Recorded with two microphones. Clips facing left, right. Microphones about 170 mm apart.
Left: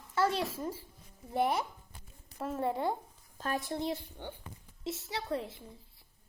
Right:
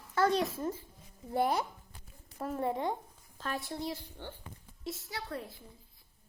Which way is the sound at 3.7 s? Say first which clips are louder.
Left 3 dB; 20° left (ahead or behind).